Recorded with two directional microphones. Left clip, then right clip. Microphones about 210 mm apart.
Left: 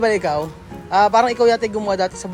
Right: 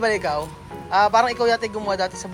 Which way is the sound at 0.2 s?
25° left (ahead or behind).